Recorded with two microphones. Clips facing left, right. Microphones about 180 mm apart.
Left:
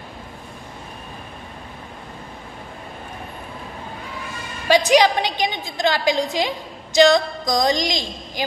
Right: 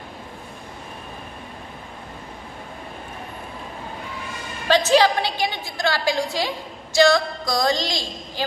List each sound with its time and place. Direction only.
4.6 s a woman's voice: 15° left (ahead or behind)